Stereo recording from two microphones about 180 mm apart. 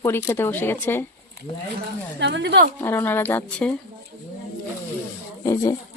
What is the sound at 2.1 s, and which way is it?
Speech, 80° right.